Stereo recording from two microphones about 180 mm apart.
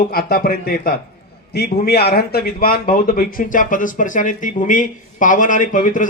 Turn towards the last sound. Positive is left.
turn(degrees=45)  # may be behind; listen again after turning